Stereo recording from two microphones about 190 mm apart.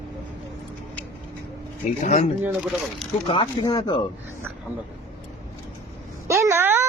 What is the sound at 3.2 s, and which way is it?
Speech, 25° left (ahead or behind).